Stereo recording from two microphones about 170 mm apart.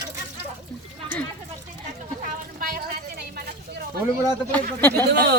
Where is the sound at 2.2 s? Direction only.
65° right (ahead or behind).